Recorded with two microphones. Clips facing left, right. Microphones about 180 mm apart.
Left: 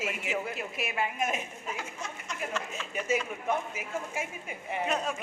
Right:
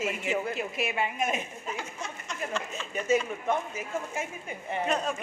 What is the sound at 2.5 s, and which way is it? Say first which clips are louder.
A woman's voice: right 3 dB; 5° left (ahead or behind).